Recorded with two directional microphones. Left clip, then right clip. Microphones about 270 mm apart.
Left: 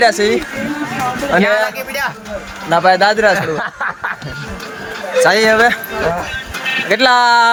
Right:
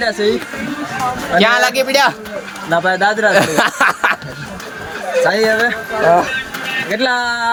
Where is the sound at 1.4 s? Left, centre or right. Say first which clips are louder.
Right 4 dB; right.